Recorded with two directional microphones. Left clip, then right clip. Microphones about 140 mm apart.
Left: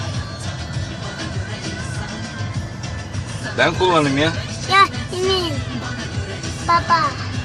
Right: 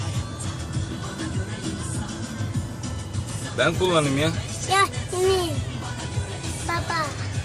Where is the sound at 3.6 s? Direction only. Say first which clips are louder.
Left 5 dB; 15° left (ahead or behind).